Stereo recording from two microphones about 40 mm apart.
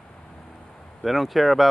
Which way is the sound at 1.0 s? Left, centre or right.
Centre.